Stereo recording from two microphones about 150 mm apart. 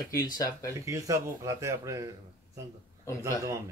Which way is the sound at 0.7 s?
20° right (ahead or behind).